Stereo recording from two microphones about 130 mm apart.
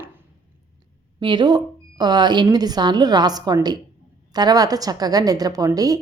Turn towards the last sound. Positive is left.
turn(degrees=-30)  # may be behind; listen again after turning